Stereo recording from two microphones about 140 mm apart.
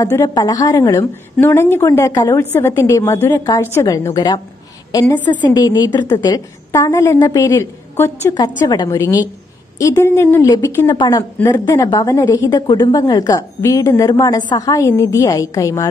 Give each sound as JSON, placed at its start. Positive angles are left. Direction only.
{"t": 0.0, "sound": "a woman's voice", "side_deg": 25}
{"t": 5.5, "sound": "a woman's voice", "side_deg": 30}
{"t": 8.4, "sound": "a woman's voice", "side_deg": 30}